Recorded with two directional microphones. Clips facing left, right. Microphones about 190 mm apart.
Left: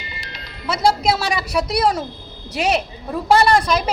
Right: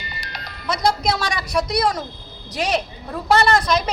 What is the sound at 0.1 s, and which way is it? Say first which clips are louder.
Music: right 1 dB; 50° right (ahead or behind).